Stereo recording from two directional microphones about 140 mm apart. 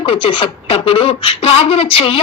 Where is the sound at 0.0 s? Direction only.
40° left (ahead or behind).